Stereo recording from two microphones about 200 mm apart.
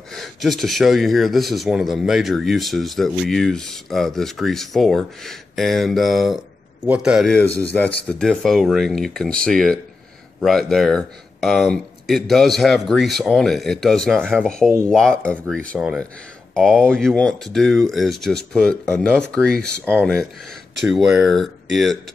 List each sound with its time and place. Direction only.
0.1 s speech: centre (ahead or behind)